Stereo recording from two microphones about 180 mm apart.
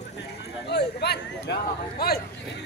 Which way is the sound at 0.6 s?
65° left (ahead or behind).